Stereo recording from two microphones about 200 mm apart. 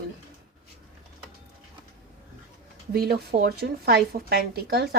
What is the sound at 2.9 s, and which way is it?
A woman's voice, 50° right (ahead or behind).